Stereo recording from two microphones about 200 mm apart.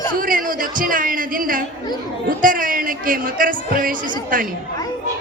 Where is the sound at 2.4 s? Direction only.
45° right (ahead or behind).